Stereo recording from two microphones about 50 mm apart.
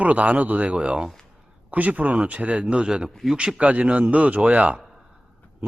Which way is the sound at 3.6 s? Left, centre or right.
Right.